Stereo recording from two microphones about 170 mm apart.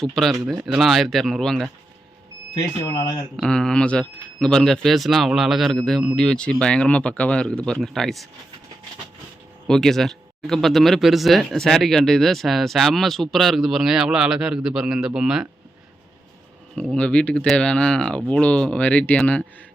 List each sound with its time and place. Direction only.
0.0 s speech: centre (ahead or behind)
2.6 s speech: 15° left (ahead or behind)
3.3 s speech: 5° left (ahead or behind)
9.6 s speech: 5° left (ahead or behind)
16.7 s speech: 5° left (ahead or behind)